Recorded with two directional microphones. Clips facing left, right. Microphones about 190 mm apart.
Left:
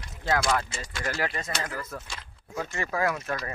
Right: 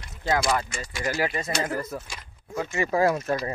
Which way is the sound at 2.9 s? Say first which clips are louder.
Right 6 dB; 30° right (ahead or behind).